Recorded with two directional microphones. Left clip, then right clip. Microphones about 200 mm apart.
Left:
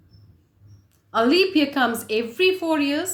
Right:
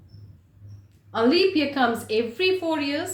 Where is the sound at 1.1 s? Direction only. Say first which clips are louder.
Left 2 dB; 50° left (ahead or behind).